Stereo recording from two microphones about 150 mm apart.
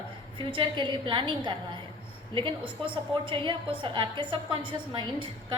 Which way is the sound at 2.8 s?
35° right (ahead or behind).